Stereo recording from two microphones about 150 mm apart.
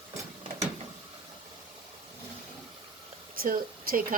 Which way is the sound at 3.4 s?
70° right (ahead or behind).